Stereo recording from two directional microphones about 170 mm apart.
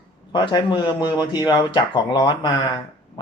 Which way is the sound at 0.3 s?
25° left (ahead or behind).